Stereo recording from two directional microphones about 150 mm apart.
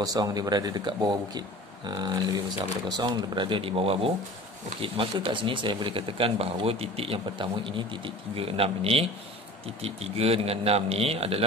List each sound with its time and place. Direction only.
0.0 s speech: 25° right (ahead or behind); by 11.4 s 40° right (ahead or behind)